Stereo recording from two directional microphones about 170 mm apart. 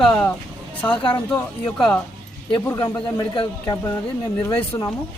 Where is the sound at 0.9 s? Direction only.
30° left (ahead or behind).